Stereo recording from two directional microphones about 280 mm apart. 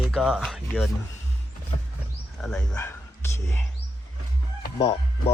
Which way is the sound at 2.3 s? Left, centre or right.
Centre.